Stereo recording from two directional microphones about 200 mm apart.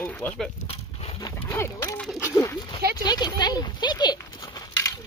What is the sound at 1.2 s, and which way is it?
Speech, 15° left (ahead or behind).